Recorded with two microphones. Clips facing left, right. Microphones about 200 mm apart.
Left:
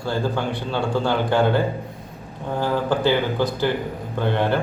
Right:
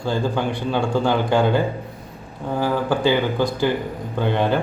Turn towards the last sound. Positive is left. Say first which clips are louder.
# right 1 dB
turn(degrees=-15)  # may be behind; listen again after turning